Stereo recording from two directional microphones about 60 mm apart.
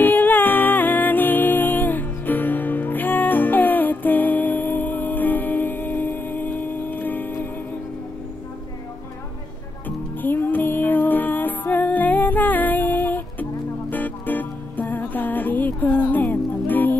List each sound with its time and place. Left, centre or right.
0.0 s music: left
9.8 s music: left